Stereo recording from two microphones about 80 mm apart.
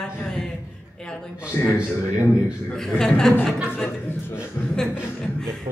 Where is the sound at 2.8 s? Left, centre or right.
Centre.